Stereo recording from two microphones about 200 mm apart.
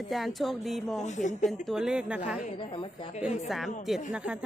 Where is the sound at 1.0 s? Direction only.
35° left (ahead or behind).